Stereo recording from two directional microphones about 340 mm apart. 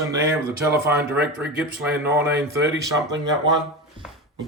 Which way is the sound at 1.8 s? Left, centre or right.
Centre.